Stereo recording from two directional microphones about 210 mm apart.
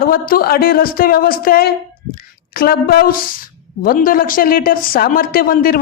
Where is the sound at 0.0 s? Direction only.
45° left (ahead or behind).